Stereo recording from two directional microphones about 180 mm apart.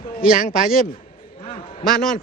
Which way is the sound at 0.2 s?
50° left (ahead or behind).